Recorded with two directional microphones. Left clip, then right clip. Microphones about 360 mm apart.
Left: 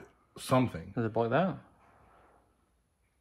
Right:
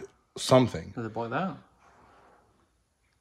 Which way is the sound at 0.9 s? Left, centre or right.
Left.